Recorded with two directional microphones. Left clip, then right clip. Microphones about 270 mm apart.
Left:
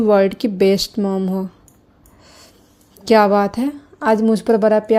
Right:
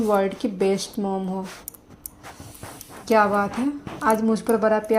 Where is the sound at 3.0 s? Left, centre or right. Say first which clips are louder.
Left 6 dB; left.